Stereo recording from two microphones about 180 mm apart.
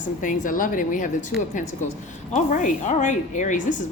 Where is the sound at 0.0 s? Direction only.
45° left (ahead or behind).